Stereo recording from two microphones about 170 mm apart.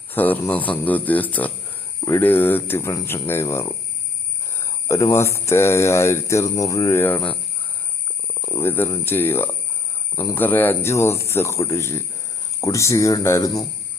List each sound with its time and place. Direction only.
0.1 s speech: 10° left (ahead or behind)
8.4 s speech: 15° left (ahead or behind)